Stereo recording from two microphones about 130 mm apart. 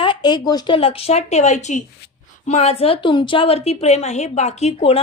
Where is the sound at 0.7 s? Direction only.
45° left (ahead or behind).